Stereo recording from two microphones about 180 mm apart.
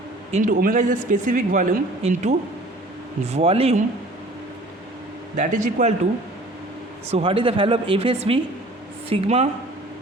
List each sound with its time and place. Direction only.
0.3 s speech: 40° right (ahead or behind)
5.4 s speech: 40° right (ahead or behind)
7.1 s speech: 30° right (ahead or behind)